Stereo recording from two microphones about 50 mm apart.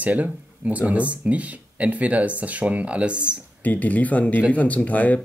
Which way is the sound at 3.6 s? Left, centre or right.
Left.